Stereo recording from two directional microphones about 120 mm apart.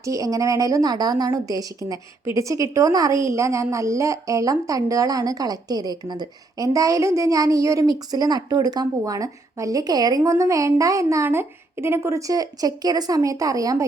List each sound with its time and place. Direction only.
0.0 s a woman's voice: 30° right (ahead or behind)